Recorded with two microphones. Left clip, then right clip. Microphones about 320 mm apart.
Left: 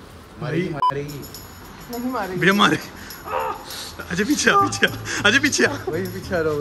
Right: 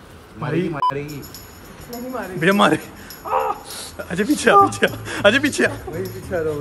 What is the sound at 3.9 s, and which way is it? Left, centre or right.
Speech, centre.